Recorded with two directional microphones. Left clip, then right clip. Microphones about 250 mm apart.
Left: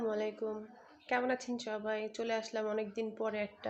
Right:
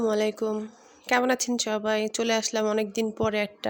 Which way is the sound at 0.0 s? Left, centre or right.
Right.